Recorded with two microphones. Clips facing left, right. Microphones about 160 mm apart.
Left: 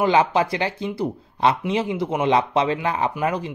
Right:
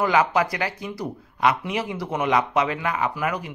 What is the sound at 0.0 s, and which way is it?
Speech, 25° left (ahead or behind).